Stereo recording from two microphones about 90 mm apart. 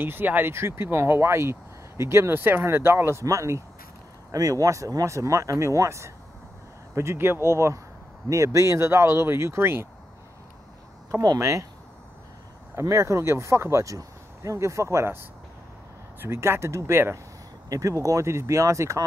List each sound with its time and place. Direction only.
0.0 s speech: 25° right (ahead or behind)
11.1 s speech: 40° right (ahead or behind)
12.7 s speech: 35° right (ahead or behind)